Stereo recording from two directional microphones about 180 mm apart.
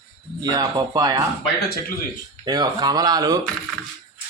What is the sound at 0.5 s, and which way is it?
Speech, 20° right (ahead or behind).